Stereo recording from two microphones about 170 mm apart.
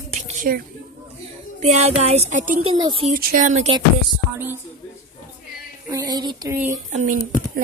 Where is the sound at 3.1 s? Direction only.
50° right (ahead or behind).